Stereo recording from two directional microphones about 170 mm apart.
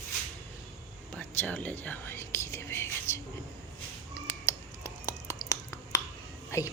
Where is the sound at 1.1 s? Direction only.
10° left (ahead or behind).